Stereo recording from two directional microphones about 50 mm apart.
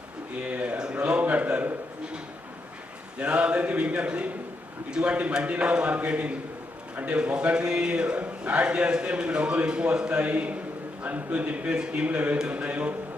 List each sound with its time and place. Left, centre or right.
0.3 s a sound: right
3.2 s a man's voice: right
7.3 s a man's voice: centre